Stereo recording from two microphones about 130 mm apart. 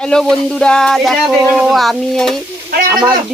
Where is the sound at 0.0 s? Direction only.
5° left (ahead or behind).